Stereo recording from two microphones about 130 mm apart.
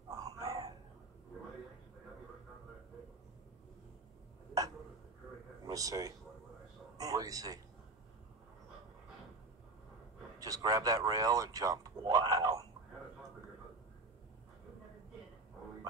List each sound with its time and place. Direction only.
0.1 s a sound: 25° right (ahead or behind)
5.7 s a man's voice: 25° right (ahead or behind)
10.4 s speech: 30° right (ahead or behind)